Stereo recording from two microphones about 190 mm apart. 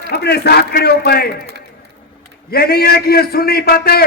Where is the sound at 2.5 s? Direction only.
55° left (ahead or behind).